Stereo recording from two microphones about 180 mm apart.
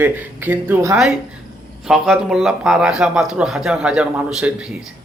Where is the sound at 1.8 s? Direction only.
Centre (ahead or behind).